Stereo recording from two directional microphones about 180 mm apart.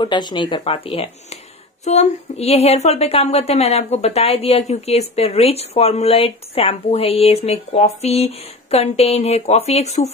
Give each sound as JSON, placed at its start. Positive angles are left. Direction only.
{"t": 0.0, "sound": "a woman's voice", "side_deg": 25}